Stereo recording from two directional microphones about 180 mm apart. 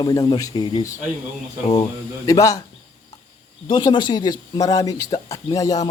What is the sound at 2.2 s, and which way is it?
Speech, 20° left (ahead or behind).